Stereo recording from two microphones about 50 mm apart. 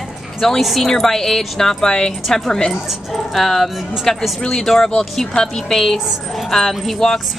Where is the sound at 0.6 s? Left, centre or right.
Centre.